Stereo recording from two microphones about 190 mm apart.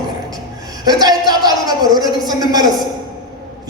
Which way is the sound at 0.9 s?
20° right (ahead or behind).